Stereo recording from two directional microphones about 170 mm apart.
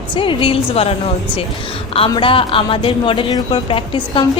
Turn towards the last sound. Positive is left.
turn(degrees=30)  # may be behind; listen again after turning